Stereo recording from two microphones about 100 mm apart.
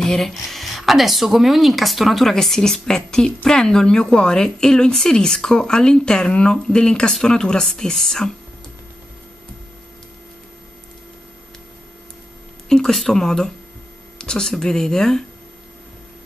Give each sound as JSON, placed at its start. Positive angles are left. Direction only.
{"t": 0.0, "sound": "a woman's voice", "side_deg": 5}
{"t": 12.6, "sound": "speech", "side_deg": 5}